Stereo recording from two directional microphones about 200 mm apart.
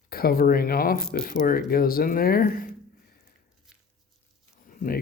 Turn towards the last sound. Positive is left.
turn(degrees=45)  # may be behind; listen again after turning